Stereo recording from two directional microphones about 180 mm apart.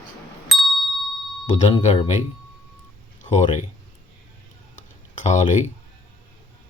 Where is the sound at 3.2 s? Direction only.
40° left (ahead or behind).